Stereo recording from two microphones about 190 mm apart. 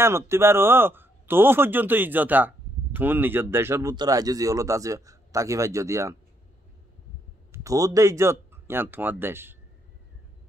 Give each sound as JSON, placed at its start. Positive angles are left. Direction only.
{"t": 0.0, "sound": "a man's voice", "side_deg": -15}
{"t": 7.5, "sound": "speech", "side_deg": -15}